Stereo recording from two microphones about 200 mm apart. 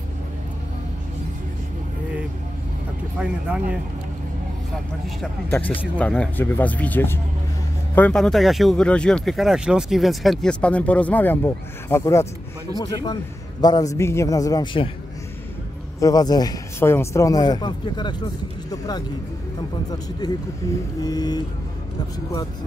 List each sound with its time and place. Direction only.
3.2 s speech: 5° right (ahead or behind)
5.5 s a man's voice: 10° left (ahead or behind); by 14.9 s 25° left (ahead or behind)
16.0 s a man's voice: 20° left (ahead or behind)
20.2 s a man's voice: 20° left (ahead or behind)